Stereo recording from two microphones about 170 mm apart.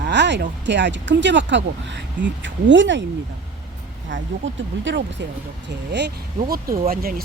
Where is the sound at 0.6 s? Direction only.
90° right.